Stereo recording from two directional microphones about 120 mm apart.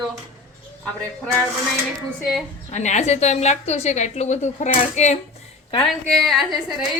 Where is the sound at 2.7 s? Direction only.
75° left (ahead or behind).